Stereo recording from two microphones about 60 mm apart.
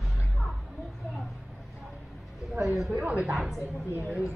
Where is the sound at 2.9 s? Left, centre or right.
Right.